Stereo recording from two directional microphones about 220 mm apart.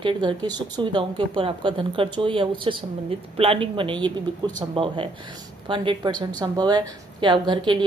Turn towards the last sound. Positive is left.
turn(degrees=-20)  # may be behind; listen again after turning